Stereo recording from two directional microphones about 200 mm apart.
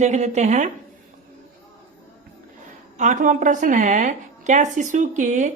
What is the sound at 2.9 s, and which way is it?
A woman's voice, 40° right (ahead or behind).